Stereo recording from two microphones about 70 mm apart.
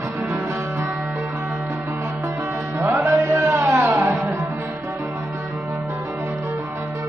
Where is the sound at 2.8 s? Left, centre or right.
Right.